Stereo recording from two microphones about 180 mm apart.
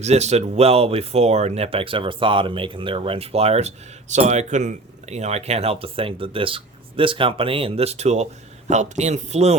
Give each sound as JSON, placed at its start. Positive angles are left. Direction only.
{"t": 0.0, "sound": "speech", "side_deg": -40}